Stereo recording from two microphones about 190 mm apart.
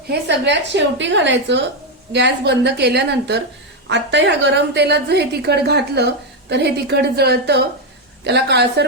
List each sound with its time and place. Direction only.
0.1 s a woman's voice: 65° right (ahead or behind)